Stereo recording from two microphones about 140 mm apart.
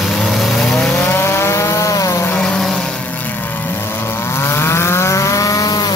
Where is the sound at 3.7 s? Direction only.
20° left (ahead or behind).